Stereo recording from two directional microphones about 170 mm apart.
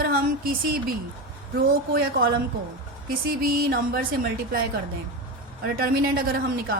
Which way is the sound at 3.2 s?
60° right (ahead or behind).